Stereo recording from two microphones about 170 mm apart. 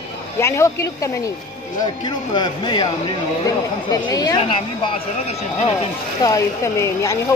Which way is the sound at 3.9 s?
20° left (ahead or behind).